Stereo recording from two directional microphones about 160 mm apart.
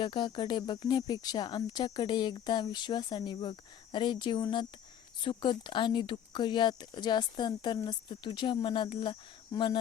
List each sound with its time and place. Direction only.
0.0 s speech: 30° left (ahead or behind)